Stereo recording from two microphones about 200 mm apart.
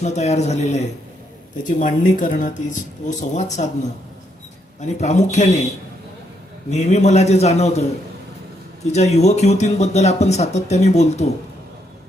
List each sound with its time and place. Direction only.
0.0 s speech: 35° left (ahead or behind)
4.8 s speech: 35° left (ahead or behind)
6.7 s speech: 35° left (ahead or behind)